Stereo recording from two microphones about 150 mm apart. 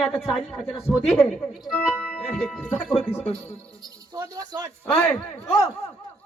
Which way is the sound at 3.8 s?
25° right (ahead or behind).